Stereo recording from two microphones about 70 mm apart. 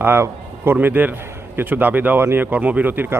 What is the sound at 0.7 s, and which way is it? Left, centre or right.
A man's voice, right.